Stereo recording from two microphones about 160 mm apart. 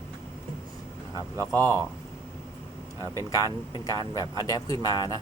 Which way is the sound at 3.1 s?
20° left (ahead or behind).